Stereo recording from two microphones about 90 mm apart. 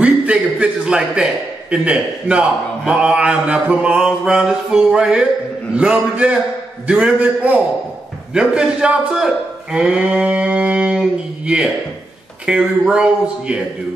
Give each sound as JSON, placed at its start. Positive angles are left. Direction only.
{"t": 0.0, "sound": "a man's voice", "side_deg": -10}